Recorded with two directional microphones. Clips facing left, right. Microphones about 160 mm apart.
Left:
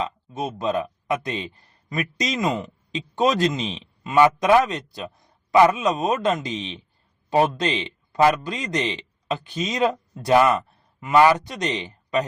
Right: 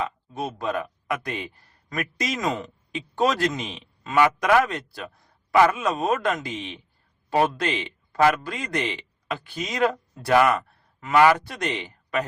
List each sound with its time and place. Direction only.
0.0 s speech: 20° left (ahead or behind)